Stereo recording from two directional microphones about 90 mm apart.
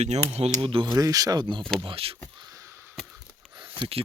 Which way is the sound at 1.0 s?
40° right (ahead or behind).